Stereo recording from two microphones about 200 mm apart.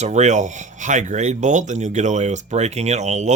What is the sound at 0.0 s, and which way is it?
Speech, 35° right (ahead or behind).